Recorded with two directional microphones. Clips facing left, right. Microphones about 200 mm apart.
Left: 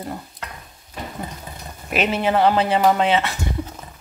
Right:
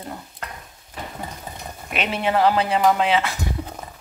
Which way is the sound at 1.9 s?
Centre (ahead or behind).